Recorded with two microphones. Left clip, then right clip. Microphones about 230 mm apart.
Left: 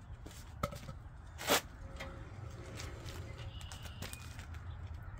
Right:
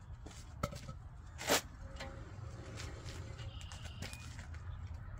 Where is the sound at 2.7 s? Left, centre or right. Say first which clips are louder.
Left 1 dB; centre.